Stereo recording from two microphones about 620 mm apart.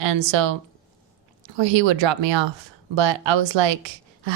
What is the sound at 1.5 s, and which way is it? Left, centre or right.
Speech, right.